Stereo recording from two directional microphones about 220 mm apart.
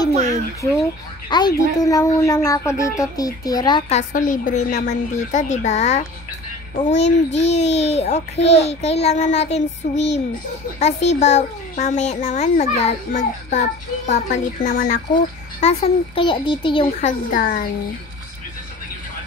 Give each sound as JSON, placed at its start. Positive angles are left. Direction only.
{"t": 1.3, "sound": "a woman's voice", "side_deg": 15}
{"t": 4.1, "sound": "a child's voice", "side_deg": 35}
{"t": 15.6, "sound": "a child's voice", "side_deg": 25}
{"t": 17.0, "sound": "a child's voice", "side_deg": 40}